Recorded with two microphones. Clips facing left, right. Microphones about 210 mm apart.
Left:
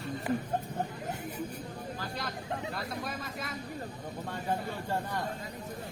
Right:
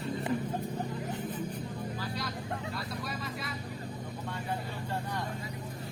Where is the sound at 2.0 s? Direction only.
50° left (ahead or behind).